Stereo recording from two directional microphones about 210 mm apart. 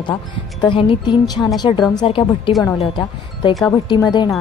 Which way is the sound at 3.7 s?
15° left (ahead or behind).